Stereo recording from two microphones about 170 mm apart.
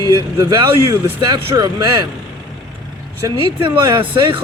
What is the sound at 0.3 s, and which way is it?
Speech, 25° right (ahead or behind).